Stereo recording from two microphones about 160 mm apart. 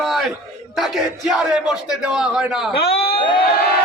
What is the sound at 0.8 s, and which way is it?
A man's voice, centre (ahead or behind).